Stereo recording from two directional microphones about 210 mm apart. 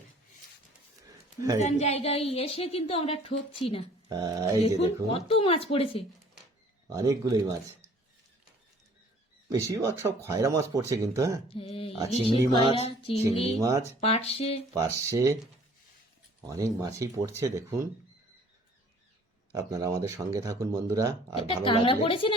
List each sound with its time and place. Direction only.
1.0 s a sound: 15° right (ahead or behind)
1.6 s a woman's voice: 30° left (ahead or behind)
4.1 s speech: 15° right (ahead or behind)
5.1 s a woman's voice: 25° left (ahead or behind)
6.9 s speech: 15° right (ahead or behind)
9.5 s speech: 15° right (ahead or behind)
11.4 s a woman's voice: 25° left (ahead or behind)
13.6 s speech: 15° right (ahead or behind)
14.0 s a woman's voice: 30° left (ahead or behind)
14.7 s speech: 15° right (ahead or behind)
16.5 s speech: 15° right (ahead or behind)
19.5 s speech: 15° right (ahead or behind)
21.3 s a woman's voice: 25° left (ahead or behind)